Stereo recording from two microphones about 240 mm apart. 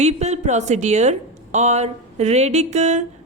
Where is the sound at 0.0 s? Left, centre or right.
Right.